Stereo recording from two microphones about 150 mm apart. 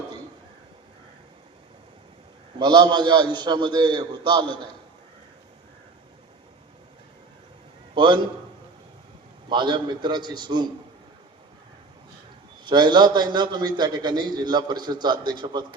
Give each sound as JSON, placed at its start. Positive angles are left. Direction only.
{"t": 2.6, "sound": "a man's voice", "side_deg": -30}
{"t": 7.9, "sound": "a man's voice", "side_deg": -35}
{"t": 9.5, "sound": "a man's voice", "side_deg": -30}
{"t": 12.6, "sound": "a man's voice", "side_deg": -30}